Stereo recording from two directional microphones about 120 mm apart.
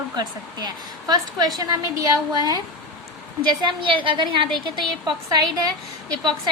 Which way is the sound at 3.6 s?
45° right (ahead or behind).